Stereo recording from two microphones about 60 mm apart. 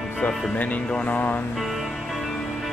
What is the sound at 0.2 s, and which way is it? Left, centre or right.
Speech, left.